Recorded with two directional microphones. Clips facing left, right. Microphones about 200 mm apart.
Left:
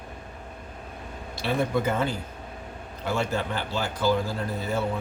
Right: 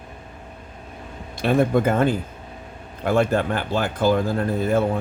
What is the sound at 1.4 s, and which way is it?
Speech, 50° right (ahead or behind).